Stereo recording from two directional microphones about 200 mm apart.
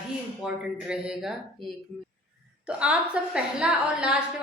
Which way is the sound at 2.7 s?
5° right (ahead or behind).